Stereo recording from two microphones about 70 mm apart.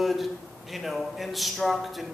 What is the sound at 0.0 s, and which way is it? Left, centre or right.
Speech, centre.